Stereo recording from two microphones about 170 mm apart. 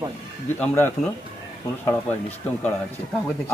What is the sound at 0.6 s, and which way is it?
Speech, 10° left (ahead or behind).